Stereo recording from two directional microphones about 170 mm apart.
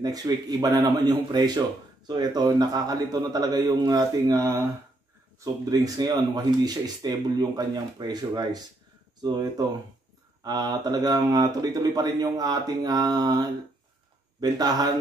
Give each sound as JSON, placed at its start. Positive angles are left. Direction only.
{"t": 0.0, "sound": "speech", "side_deg": -20}